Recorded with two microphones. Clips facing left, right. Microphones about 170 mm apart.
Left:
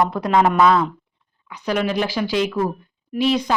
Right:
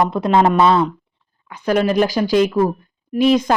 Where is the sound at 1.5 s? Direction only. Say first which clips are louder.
Right 5 dB; 50° right (ahead or behind).